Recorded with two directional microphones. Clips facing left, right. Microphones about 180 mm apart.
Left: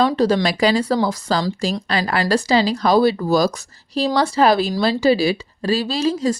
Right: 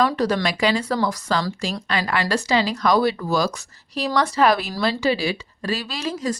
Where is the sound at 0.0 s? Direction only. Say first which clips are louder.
Left 4 dB; 30° left (ahead or behind).